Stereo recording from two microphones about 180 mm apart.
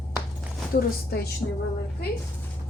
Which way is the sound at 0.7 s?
60° left (ahead or behind).